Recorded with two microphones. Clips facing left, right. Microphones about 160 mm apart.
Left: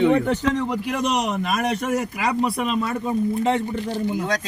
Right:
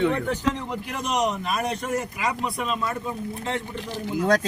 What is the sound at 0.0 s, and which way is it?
Speech, 15° left (ahead or behind).